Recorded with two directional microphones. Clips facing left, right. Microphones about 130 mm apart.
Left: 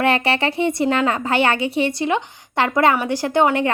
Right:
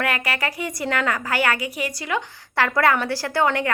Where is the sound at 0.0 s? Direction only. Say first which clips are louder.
Left 6 dB; 25° left (ahead or behind).